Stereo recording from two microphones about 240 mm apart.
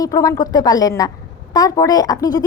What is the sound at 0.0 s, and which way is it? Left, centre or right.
A woman's voice, centre.